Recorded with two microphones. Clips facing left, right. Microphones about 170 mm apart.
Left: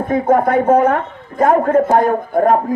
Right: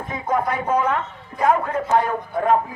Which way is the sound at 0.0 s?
50° left (ahead or behind).